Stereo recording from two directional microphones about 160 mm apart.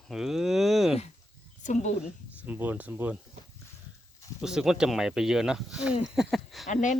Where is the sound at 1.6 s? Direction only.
50° left (ahead or behind).